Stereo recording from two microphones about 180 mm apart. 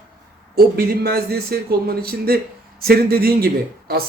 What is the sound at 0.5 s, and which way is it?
Speech, 60° right (ahead or behind).